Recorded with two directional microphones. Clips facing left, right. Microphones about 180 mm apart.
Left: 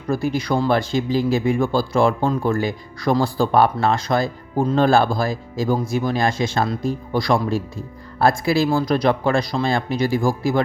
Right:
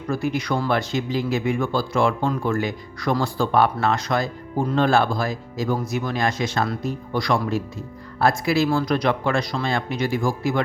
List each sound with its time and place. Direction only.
0.1 s speech: 35° left (ahead or behind)